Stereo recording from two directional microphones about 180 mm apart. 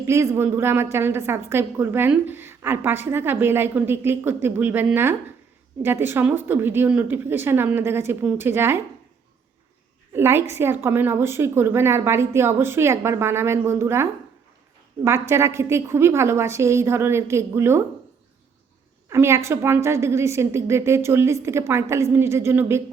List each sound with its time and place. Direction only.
0.0 s a woman's voice: 15° right (ahead or behind)
10.1 s a sound: 15° right (ahead or behind)
10.5 s a woman's voice: 15° right (ahead or behind)
19.0 s a woman's voice: 15° right (ahead or behind)